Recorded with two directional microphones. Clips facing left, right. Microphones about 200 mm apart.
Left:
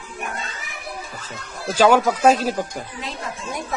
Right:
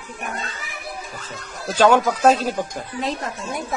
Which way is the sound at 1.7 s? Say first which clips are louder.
Even; 10° left (ahead or behind).